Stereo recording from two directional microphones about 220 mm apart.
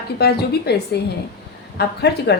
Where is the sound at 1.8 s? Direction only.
50° left (ahead or behind).